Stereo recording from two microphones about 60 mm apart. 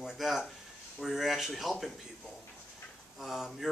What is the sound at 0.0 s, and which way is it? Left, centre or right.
Speech, centre.